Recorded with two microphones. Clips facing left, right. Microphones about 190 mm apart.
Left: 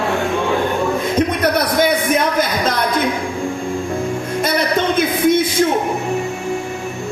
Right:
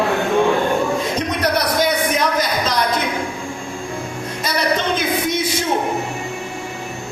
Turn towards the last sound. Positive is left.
turn(degrees=55)  # may be behind; listen again after turning